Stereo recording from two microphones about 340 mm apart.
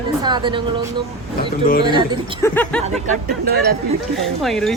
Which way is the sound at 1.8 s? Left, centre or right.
Centre.